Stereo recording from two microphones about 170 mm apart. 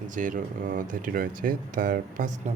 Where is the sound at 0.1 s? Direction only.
50° right (ahead or behind).